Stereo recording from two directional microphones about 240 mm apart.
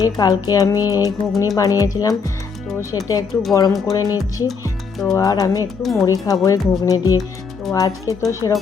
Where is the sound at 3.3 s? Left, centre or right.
Centre.